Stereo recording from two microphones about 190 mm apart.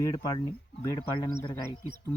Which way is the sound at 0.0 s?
20° left (ahead or behind).